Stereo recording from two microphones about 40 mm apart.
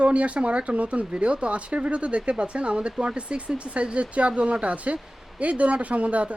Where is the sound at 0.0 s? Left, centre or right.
Right.